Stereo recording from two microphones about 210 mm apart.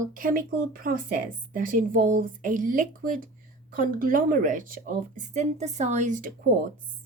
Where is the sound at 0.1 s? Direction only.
40° right (ahead or behind).